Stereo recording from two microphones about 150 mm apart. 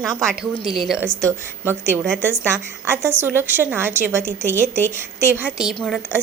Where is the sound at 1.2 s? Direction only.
15° right (ahead or behind); by 6.0 s centre (ahead or behind).